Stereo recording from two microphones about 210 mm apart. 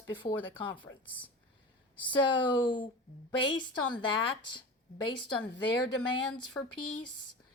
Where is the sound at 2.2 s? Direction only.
20° left (ahead or behind).